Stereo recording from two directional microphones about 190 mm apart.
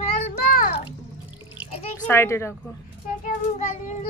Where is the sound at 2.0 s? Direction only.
10° left (ahead or behind).